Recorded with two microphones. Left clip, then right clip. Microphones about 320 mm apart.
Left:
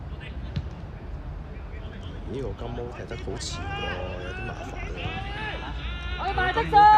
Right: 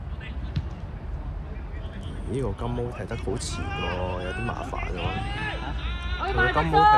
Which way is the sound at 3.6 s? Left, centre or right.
Left.